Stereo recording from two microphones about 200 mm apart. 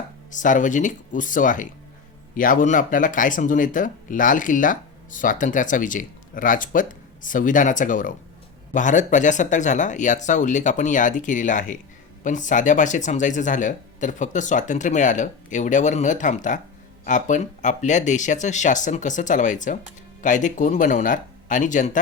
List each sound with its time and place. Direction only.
0.3 s speech: 40° left (ahead or behind)